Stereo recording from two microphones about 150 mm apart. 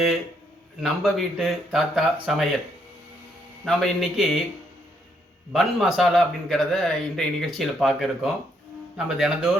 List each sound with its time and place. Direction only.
0.8 s a man's voice: centre (ahead or behind)
3.7 s a man's voice: centre (ahead or behind)
5.5 s a man's voice: centre (ahead or behind)